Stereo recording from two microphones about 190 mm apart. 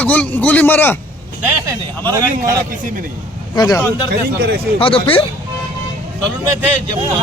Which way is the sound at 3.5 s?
20° left (ahead or behind).